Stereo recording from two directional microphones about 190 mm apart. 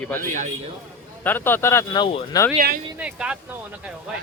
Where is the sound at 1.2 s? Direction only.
10° left (ahead or behind); by 2.4 s 25° left (ahead or behind).